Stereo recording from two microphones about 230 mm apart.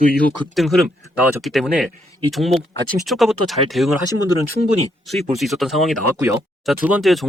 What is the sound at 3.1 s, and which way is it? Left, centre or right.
Speech, centre.